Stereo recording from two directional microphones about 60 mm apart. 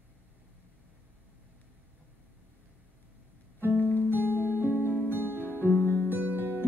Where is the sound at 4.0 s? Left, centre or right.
Right.